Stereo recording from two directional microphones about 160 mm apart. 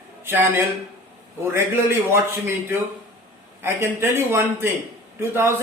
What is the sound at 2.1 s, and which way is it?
A man's voice, 15° right (ahead or behind).